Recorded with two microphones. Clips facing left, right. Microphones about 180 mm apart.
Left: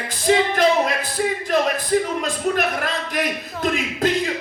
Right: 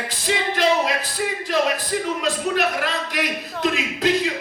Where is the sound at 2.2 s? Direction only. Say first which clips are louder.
Even; 50° left (ahead or behind).